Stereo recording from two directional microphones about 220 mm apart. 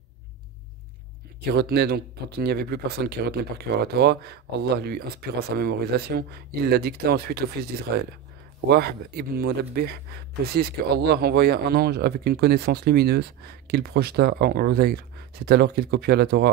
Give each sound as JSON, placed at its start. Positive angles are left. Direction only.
{"t": 1.5, "sound": "speech", "side_deg": -50}